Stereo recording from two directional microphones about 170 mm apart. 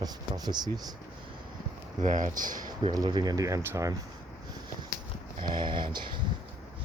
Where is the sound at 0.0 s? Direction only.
25° right (ahead or behind).